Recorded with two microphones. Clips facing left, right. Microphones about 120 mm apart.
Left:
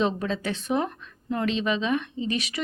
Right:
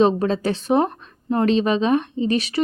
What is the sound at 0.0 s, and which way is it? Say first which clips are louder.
A woman's voice: right 8 dB; 40° right (ahead or behind).